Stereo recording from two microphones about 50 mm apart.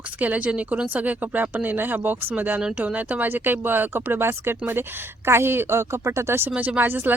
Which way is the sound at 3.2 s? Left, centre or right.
Right.